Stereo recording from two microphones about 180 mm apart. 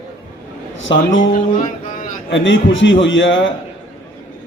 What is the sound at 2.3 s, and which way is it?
Speech, 90° left.